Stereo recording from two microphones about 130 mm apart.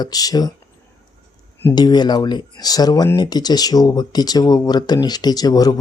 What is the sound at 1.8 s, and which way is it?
Speech, 35° left (ahead or behind).